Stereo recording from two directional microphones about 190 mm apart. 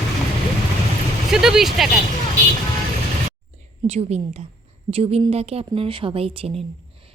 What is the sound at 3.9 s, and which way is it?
A woman's voice, 35° right (ahead or behind).